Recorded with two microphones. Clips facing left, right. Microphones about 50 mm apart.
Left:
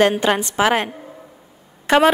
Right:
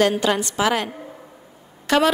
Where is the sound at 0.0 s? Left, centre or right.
Left.